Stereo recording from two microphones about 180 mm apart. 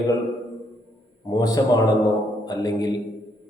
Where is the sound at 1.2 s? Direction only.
20° left (ahead or behind).